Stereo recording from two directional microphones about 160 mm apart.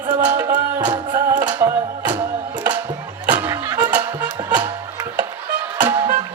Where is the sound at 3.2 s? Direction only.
10° right (ahead or behind).